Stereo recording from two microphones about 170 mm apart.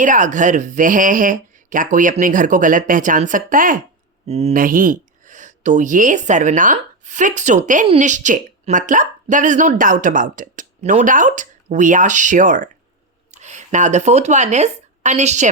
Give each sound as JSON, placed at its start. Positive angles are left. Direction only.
{"t": 0.0, "sound": "speech", "side_deg": -50}
{"t": 4.3, "sound": "speech", "side_deg": -40}
{"t": 4.5, "sound": "speech", "side_deg": -55}